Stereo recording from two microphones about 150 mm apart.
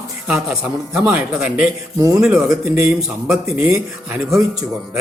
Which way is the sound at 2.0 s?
20° right (ahead or behind).